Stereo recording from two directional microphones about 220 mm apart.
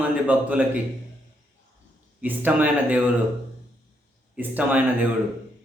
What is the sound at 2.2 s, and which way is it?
Speech, 5° right (ahead or behind).